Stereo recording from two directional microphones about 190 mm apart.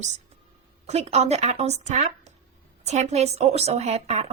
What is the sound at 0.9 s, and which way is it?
A woman's voice, 35° right (ahead or behind).